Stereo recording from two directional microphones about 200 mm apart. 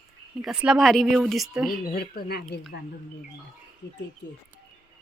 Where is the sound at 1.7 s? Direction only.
45° left (ahead or behind).